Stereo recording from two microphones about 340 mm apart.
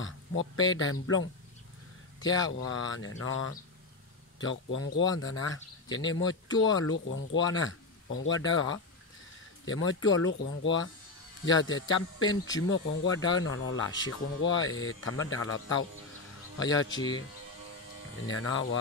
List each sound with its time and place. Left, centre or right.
0.0 s speech: left
12.2 s speech: centre
12.6 s speech: left
16.9 s speech: centre
18.2 s speech: left